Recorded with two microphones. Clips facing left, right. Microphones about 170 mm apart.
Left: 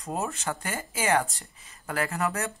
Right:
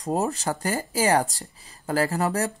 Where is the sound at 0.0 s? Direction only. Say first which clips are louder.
Right 6 dB; 35° right (ahead or behind).